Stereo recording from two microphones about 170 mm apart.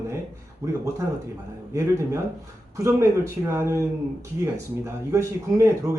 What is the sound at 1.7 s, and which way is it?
Speech, 15° right (ahead or behind).